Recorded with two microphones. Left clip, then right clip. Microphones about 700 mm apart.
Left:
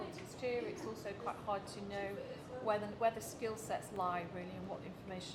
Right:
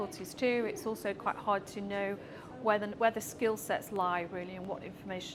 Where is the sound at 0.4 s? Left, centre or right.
Right.